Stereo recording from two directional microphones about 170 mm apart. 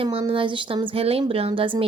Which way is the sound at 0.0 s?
30° right (ahead or behind).